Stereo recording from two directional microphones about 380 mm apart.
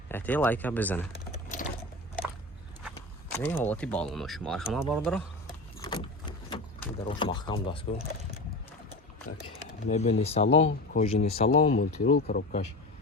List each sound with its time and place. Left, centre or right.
0.1 s speech: centre
3.3 s speech: centre
5.8 s boat: centre
9.5 s speech: centre